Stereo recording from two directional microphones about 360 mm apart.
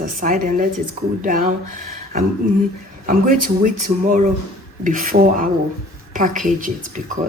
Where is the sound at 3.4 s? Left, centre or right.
Right.